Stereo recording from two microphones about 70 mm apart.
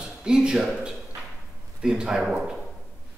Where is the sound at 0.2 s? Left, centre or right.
Centre.